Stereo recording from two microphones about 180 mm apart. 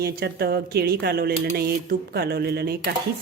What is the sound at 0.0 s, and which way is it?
Speech, 60° right (ahead or behind).